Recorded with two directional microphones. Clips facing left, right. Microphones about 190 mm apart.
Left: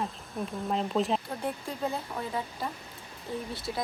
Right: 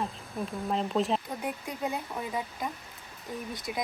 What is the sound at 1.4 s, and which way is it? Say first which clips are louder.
A woman's voice: left 1 dB; 15° right (ahead or behind).